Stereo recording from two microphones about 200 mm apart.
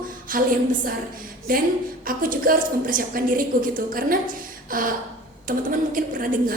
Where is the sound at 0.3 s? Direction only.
45° right (ahead or behind).